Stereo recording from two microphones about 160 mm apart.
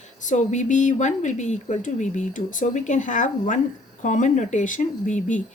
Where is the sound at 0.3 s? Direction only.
50° left (ahead or behind).